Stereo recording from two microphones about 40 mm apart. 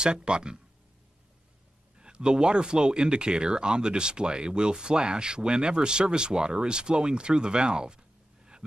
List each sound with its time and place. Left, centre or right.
0.0 s speech: right
2.0 s speech: right